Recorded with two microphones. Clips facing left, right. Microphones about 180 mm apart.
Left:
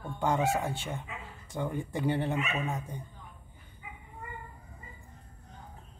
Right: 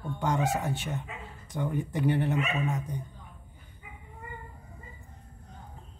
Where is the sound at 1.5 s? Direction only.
10° left (ahead or behind).